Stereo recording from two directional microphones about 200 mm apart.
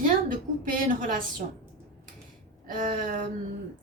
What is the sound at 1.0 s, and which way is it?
Speech, 40° right (ahead or behind).